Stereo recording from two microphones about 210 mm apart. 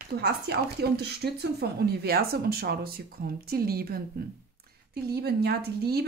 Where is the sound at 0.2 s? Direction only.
50° right (ahead or behind).